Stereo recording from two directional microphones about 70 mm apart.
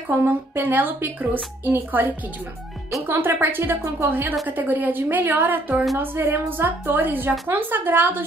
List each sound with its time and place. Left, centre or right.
0.1 s a woman's voice: right
3.1 s a woman's voice: right